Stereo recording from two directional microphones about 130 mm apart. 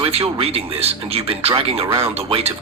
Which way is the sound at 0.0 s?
45° right (ahead or behind).